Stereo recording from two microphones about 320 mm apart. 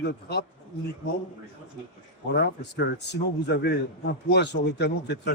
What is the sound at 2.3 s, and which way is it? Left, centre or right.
A man's voice, left.